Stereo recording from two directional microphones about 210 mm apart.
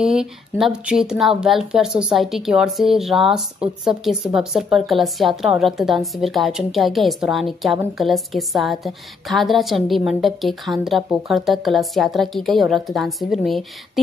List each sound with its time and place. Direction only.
0.0 s a woman's voice: 5° right (ahead or behind)